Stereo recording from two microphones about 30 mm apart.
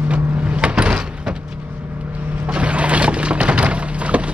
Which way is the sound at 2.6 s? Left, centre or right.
Right.